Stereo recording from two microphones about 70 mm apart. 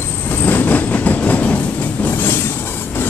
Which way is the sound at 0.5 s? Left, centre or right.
Left.